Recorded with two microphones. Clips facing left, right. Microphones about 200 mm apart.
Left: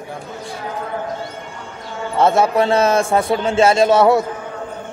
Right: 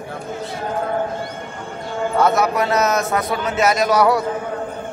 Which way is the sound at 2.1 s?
25° left (ahead or behind).